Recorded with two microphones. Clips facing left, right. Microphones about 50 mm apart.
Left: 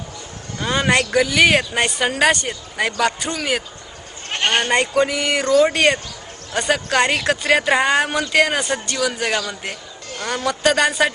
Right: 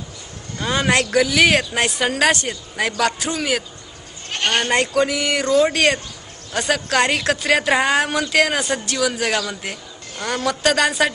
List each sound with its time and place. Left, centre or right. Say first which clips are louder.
0.6 s speech: left 1 dB; centre
4.3 s bleat: left 1 dB; left
4.6 s speech: even; centre